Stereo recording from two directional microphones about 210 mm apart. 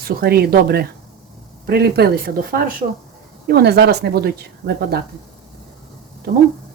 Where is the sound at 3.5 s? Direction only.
50° right (ahead or behind).